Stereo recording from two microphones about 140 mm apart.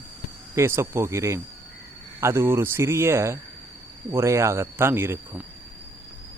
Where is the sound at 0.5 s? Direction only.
20° right (ahead or behind).